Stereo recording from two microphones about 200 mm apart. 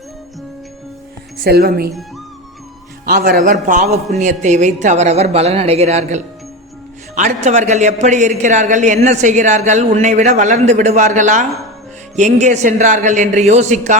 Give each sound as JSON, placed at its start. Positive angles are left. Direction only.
{"t": 1.5, "sound": "speech", "side_deg": -50}
{"t": 3.1, "sound": "a woman's voice", "side_deg": -45}